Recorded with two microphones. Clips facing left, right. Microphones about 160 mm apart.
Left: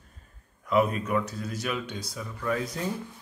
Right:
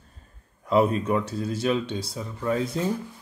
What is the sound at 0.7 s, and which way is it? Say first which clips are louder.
Speech: right 3 dB; 30° right (ahead or behind).